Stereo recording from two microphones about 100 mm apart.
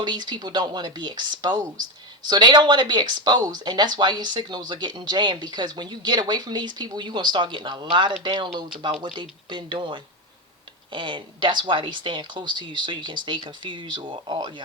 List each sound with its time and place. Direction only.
0.0 s speech: 50° right (ahead or behind)